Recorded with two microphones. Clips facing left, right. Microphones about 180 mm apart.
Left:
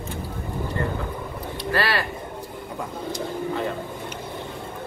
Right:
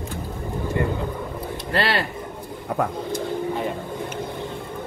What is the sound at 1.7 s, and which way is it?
Speech, 25° right (ahead or behind).